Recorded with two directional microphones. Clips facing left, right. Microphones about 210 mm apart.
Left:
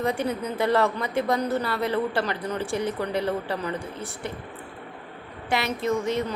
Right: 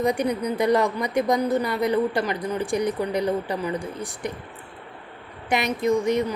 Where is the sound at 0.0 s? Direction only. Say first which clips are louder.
Right 3 dB; 15° right (ahead or behind).